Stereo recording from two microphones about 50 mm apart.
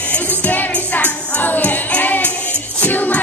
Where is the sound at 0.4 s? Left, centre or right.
Left.